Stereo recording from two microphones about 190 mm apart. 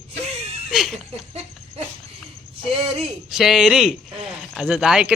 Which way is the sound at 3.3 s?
Centre (ahead or behind).